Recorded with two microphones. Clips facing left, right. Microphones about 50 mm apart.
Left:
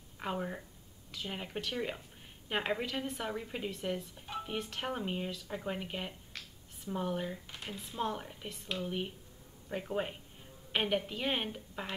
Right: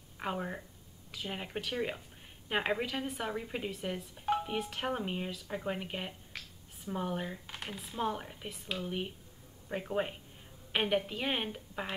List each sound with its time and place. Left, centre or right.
0.2 s a woman's voice: centre
7.4 s speech: right
8.0 s speech: centre